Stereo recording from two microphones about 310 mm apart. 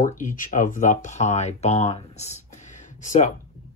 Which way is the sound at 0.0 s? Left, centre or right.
Left.